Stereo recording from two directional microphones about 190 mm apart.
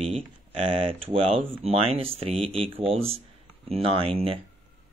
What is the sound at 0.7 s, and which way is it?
Speech, 30° right (ahead or behind).